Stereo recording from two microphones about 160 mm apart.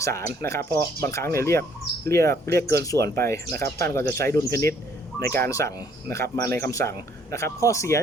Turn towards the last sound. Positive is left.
turn(degrees=20)  # may be behind; listen again after turning